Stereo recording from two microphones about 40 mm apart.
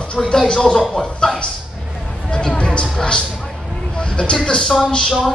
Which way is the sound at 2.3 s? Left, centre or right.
Left.